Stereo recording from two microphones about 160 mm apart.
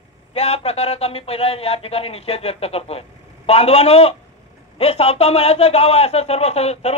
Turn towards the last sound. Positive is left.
turn(degrees=40)  # may be behind; listen again after turning